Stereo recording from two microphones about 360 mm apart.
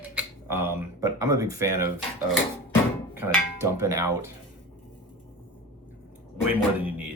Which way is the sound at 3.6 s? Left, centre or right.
Right.